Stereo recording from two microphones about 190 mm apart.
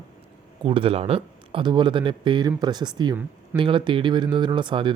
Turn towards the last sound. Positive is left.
turn(degrees=-25)  # may be behind; listen again after turning